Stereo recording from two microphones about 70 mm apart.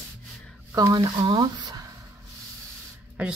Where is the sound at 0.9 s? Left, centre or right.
Right.